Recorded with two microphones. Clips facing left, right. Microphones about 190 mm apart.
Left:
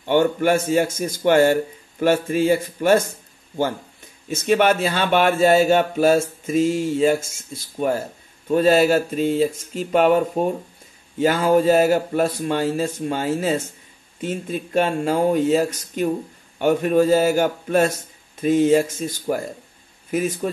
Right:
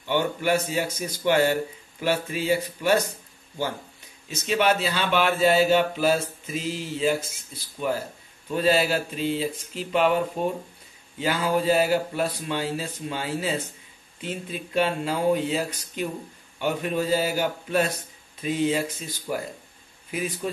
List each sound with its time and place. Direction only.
0.0 s speech: 50° left (ahead or behind)
4.3 s a man's voice: 50° left (ahead or behind)